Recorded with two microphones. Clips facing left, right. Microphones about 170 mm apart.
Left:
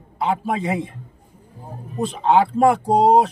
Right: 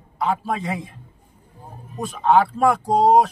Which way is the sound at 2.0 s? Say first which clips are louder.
Left 1 dB; 20° left (ahead or behind).